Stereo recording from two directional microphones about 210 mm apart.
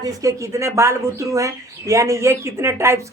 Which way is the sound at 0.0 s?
15° right (ahead or behind).